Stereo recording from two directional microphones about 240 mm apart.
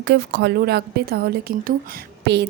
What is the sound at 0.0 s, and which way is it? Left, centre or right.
A woman's voice, right.